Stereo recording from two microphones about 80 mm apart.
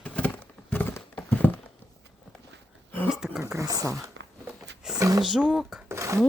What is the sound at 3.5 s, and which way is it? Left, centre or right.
Speech, right.